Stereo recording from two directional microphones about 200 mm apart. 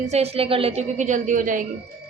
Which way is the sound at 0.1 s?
30° right (ahead or behind).